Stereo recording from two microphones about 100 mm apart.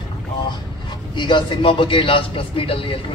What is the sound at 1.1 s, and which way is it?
A man's voice, 55° left (ahead or behind).